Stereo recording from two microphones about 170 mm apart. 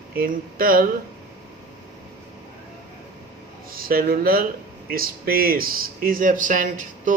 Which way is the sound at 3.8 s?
60° right (ahead or behind).